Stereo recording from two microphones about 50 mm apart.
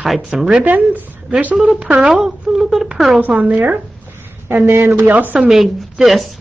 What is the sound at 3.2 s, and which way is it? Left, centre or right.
Speech, right.